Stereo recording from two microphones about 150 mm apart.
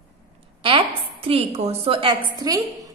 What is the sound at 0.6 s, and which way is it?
A woman's voice, 35° right (ahead or behind).